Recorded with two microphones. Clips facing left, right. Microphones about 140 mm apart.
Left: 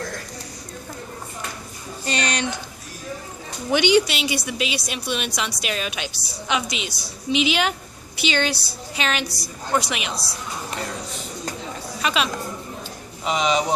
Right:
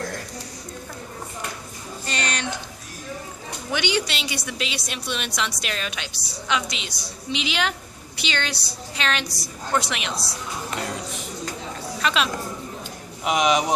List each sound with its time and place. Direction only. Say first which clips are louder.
2.0 s a sound: left 4 dB; 15° left (ahead or behind)
3.7 s a woman's voice: left 7 dB; 15° left (ahead or behind)
12.0 s speech: even; 5° left (ahead or behind)
13.2 s speech: right 1 dB; 10° right (ahead or behind)